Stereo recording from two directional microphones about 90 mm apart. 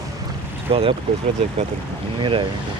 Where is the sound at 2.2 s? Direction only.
70° right (ahead or behind).